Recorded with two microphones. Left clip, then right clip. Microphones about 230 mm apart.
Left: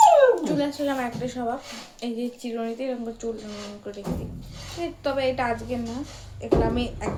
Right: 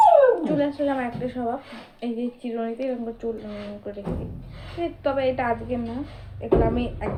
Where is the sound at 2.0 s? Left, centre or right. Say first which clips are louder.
Right 1 dB; left.